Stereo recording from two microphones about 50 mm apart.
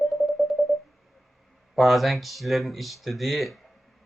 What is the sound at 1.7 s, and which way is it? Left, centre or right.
Speech, centre.